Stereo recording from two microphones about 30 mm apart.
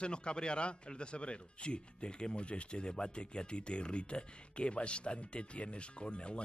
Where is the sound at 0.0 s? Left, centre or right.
Left.